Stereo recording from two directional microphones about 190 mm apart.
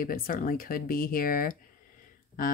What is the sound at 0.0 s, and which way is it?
Speech, 45° left (ahead or behind).